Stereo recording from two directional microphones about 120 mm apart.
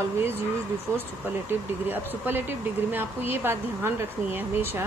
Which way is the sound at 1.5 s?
15° right (ahead or behind).